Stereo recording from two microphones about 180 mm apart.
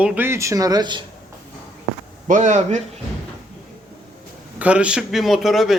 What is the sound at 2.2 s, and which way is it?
Speech, 45° right (ahead or behind).